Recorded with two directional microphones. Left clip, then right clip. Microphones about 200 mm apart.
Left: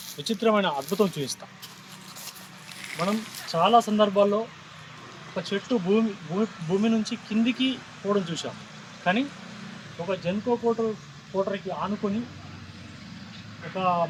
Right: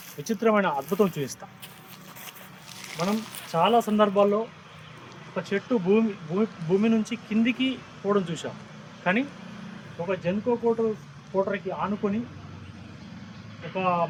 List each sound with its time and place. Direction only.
0.3 s speech: centre (ahead or behind)
2.8 s speech: 5° right (ahead or behind)
7.4 s speech: 45° right (ahead or behind)
8.0 s speech: 20° right (ahead or behind)
10.1 s speech: 10° right (ahead or behind)
13.7 s speech: 10° right (ahead or behind)